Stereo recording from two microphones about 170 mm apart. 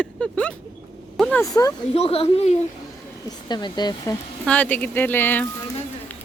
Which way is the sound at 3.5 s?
25° left (ahead or behind).